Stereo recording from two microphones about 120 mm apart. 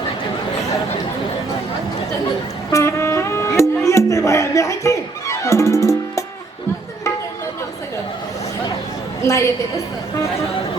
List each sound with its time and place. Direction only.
2.7 s music: 25° left (ahead or behind)
9.2 s a woman's voice: 25° left (ahead or behind)